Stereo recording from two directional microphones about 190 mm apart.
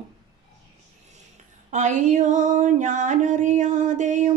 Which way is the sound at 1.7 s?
40° right (ahead or behind).